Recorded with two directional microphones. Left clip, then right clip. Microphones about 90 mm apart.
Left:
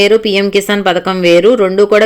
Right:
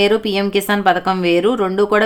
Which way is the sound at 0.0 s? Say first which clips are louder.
Left 6 dB; 25° left (ahead or behind).